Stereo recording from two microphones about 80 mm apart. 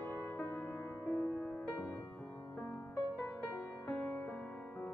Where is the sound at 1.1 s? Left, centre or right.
Left.